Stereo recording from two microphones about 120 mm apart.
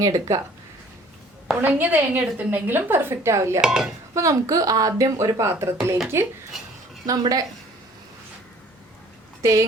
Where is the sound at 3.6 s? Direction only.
5° right (ahead or behind).